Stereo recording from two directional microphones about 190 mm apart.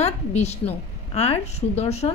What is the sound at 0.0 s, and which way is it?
A woman's voice, 35° left (ahead or behind).